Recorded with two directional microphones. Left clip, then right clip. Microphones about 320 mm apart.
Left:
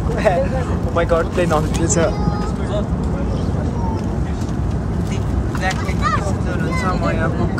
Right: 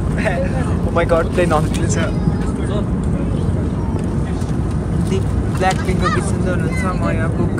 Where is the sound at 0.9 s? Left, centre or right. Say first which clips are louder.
Right 1 dB; centre.